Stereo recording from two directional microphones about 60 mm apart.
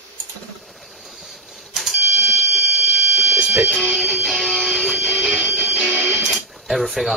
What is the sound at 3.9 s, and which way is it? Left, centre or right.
Music, centre.